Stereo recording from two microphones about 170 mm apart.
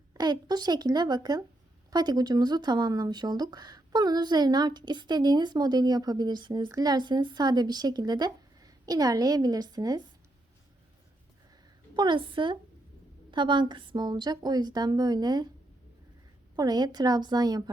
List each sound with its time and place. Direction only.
0.1 s speech: 25° right (ahead or behind)
11.9 s speech: 30° right (ahead or behind)
16.6 s speech: 25° right (ahead or behind)